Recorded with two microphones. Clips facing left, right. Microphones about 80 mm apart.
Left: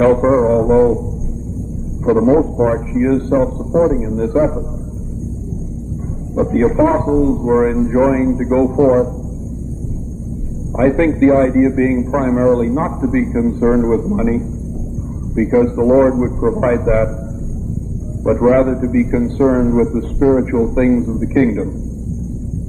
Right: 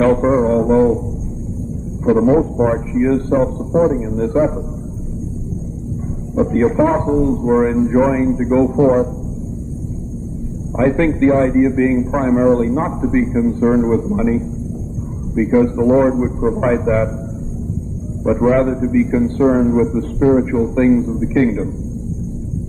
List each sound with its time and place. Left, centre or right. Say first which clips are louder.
0.0 s music: left 2 dB; centre
0.4 s music: left 2 dB; centre
2.0 s a man's voice: left 1 dB; centre
6.4 s a man's voice: left 1 dB; centre
7.4 s music: even; centre
7.7 s a man's voice: left 1 dB; centre
10.8 s a man's voice: left 2 dB; centre
18.2 s a man's voice: left 2 dB; centre